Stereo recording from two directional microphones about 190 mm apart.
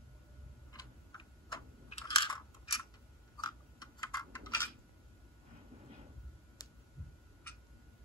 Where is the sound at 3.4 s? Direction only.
20° left (ahead or behind).